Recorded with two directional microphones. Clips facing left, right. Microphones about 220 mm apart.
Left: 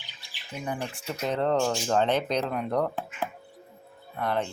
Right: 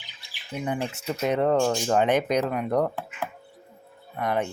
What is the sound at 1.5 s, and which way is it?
Speech, 5° right (ahead or behind).